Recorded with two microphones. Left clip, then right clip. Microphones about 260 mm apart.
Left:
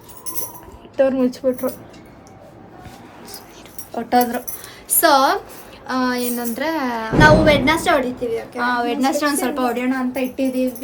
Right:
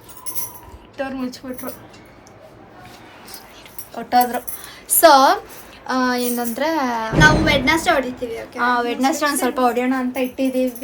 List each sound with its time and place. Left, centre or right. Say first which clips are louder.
0.9 s a woman's voice: left 10 dB; left
3.9 s a woman's voice: right 1 dB; centre
4.9 s a woman's voice: right 3 dB; centre
7.2 s a woman's voice: left 3 dB; centre
8.5 s a woman's voice: right 3 dB; centre